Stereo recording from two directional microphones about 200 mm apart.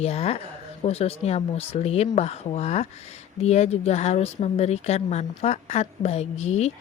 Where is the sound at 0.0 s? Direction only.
30° left (ahead or behind).